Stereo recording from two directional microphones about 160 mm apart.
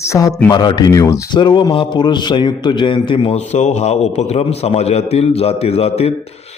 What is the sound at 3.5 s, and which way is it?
A man's voice, 45° left (ahead or behind).